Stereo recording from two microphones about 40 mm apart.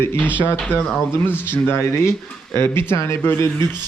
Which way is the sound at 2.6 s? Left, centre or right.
Left.